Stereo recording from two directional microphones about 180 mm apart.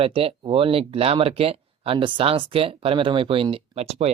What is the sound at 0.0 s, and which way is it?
Speech, 30° right (ahead or behind).